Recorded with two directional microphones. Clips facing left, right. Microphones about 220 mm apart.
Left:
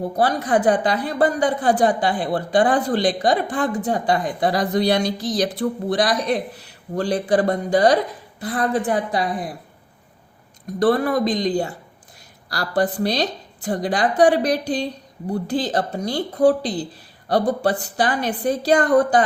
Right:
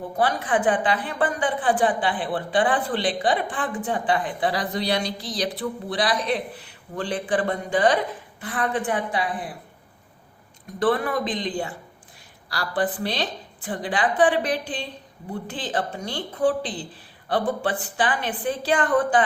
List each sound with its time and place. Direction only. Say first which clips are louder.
0.0 s a woman's voice: left 4 dB; 40° left (ahead or behind)
10.8 s a woman's voice: left 5 dB; 40° left (ahead or behind)